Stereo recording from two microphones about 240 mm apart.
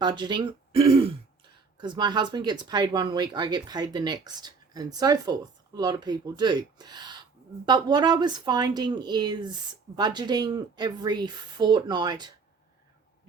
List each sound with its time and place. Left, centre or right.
0.0 s speech: centre